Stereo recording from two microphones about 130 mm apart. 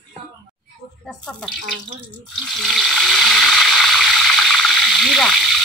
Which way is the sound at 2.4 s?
5° left (ahead or behind).